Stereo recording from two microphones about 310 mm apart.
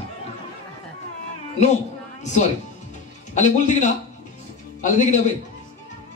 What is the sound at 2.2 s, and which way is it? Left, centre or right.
Speech, left.